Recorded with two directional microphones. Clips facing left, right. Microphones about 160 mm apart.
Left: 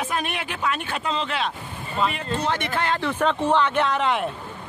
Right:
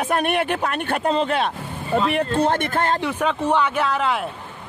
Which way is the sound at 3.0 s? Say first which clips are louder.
Even; 10° right (ahead or behind).